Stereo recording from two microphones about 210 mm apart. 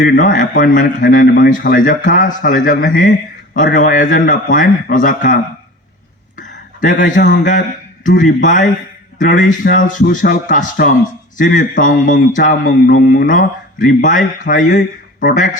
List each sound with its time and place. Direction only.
0.0 s speech: 40° left (ahead or behind)
6.3 s a sound: 40° left (ahead or behind)
8.0 s speech: 40° left (ahead or behind)